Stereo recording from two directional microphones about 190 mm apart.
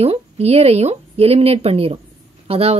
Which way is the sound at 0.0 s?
35° right (ahead or behind).